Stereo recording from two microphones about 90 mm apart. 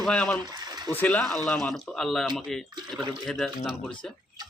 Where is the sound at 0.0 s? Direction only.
10° left (ahead or behind).